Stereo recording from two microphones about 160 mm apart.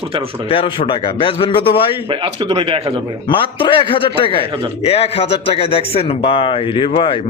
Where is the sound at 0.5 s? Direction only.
35° left (ahead or behind).